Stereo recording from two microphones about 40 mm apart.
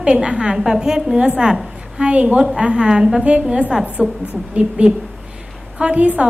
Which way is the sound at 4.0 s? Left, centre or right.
Right.